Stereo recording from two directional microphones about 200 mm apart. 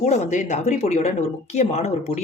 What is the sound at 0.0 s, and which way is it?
Speech, 35° left (ahead or behind).